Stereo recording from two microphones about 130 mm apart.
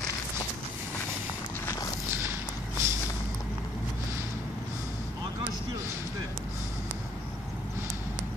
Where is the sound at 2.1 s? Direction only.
20° right (ahead or behind).